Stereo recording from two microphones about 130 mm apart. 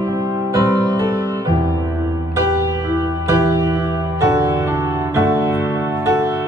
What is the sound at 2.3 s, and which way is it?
Music, 25° right (ahead or behind).